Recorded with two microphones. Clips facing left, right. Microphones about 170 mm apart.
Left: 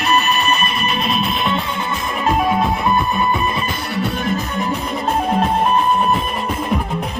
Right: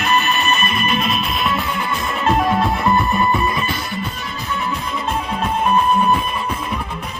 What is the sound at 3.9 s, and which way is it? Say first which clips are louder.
Music: left 7 dB; 70° left (ahead or behind).